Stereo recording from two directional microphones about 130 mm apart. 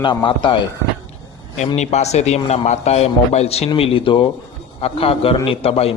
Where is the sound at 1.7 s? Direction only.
60° left (ahead or behind).